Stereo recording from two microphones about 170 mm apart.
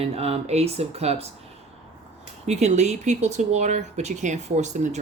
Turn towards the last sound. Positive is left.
turn(degrees=-45)  # may be behind; listen again after turning